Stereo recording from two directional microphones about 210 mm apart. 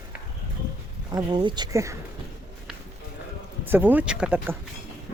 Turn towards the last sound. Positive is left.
turn(degrees=-10)  # may be behind; listen again after turning